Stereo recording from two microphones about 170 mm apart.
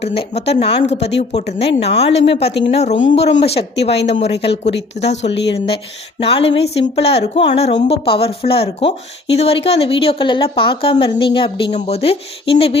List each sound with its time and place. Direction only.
0.0 s a woman's voice: 35° left (ahead or behind)
5.0 s speech: 90° left
5.6 s a woman's voice: 35° left (ahead or behind)